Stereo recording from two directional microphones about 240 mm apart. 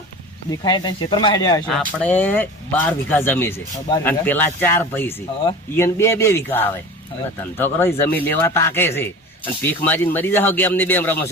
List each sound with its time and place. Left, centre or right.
0.5 s speech: centre
1.6 s speech: centre